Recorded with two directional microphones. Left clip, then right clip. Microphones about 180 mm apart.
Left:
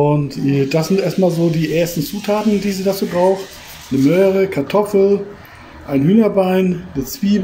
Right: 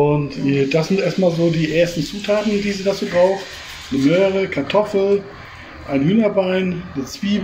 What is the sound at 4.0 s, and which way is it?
Speech, 20° left (ahead or behind).